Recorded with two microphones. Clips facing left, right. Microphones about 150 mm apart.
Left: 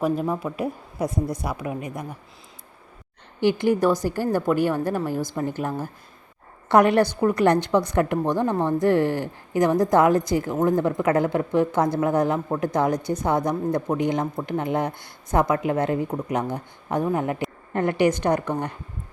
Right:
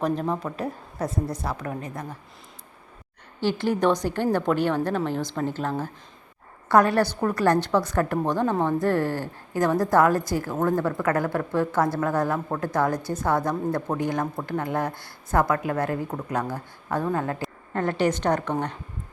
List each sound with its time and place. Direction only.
0.0 s a woman's voice: 5° left (ahead or behind)
3.4 s a woman's voice: 15° left (ahead or behind)